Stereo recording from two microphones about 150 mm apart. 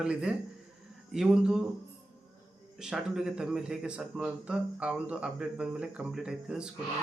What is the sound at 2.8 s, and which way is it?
Speech, 5° right (ahead or behind).